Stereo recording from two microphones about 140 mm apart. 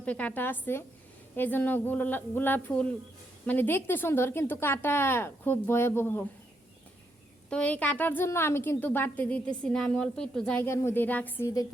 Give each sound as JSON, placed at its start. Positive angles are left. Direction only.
{"t": 0.0, "sound": "a woman's voice", "side_deg": 10}
{"t": 7.5, "sound": "a woman's voice", "side_deg": 10}
{"t": 10.6, "sound": "a woman's voice", "side_deg": 15}